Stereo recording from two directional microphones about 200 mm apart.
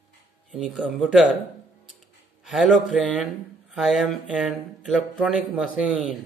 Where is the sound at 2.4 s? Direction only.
Centre (ahead or behind).